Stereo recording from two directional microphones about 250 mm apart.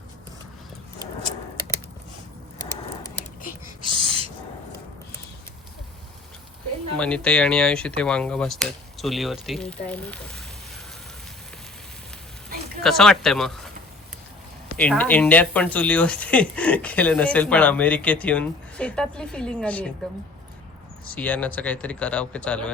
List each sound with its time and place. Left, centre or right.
3.8 s owl: right
6.9 s speech: centre
12.8 s speech: centre
14.8 s speech: centre
21.2 s speech: centre